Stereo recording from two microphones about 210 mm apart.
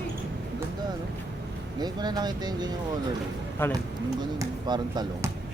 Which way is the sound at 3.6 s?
10° left (ahead or behind).